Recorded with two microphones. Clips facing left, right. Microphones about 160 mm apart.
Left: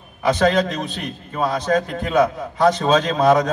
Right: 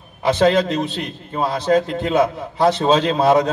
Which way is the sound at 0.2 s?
30° right (ahead or behind).